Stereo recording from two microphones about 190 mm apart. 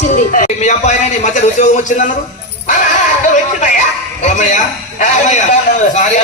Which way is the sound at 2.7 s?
40° left (ahead or behind).